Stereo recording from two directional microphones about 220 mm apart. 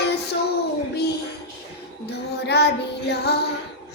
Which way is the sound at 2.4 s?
50° left (ahead or behind).